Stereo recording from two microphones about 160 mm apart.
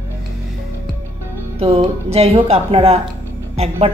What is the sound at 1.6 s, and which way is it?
A woman's voice, 35° right (ahead or behind).